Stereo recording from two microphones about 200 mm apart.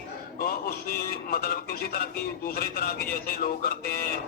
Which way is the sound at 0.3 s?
45° left (ahead or behind).